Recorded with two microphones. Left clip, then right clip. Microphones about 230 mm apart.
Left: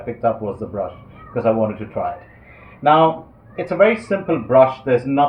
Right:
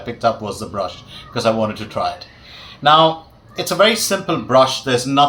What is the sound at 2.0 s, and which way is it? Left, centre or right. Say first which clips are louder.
Speech: right 3 dB; centre.